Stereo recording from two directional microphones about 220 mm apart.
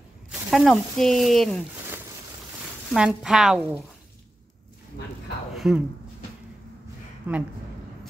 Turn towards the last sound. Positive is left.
turn(degrees=-10)  # may be behind; listen again after turning